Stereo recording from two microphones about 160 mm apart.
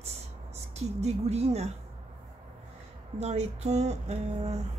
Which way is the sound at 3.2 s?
45° right (ahead or behind).